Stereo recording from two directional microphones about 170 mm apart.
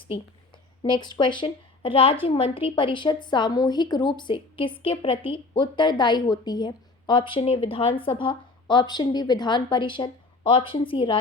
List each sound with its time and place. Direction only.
0.8 s a woman's voice: 25° left (ahead or behind)